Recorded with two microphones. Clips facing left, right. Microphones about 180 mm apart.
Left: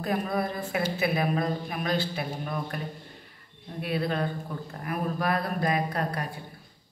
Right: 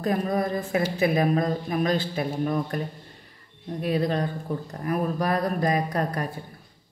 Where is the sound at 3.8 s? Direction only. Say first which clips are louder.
Right 4 dB; 40° right (ahead or behind).